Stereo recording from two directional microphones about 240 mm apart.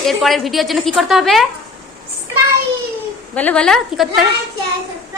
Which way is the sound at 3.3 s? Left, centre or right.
Centre.